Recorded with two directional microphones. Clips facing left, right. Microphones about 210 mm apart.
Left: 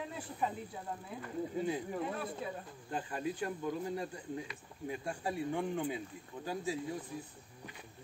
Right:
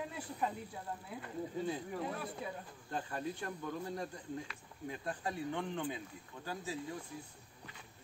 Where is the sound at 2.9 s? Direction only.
15° left (ahead or behind).